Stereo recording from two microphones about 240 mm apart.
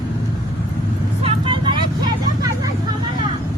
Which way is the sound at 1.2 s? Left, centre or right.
Right.